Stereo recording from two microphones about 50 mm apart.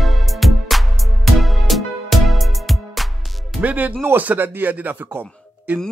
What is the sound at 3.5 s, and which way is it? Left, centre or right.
Speech, right.